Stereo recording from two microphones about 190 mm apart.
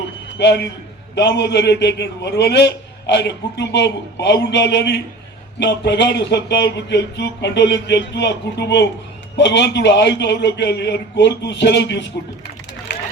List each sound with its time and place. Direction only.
0.3 s a man's voice: 65° left (ahead or behind)
12.9 s vehicle: 65° left (ahead or behind)